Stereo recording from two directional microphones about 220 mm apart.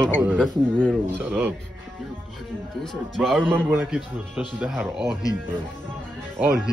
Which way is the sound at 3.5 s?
10° right (ahead or behind).